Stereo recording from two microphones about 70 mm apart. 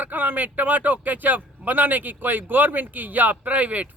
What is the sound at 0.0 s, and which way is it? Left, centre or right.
Speech, right.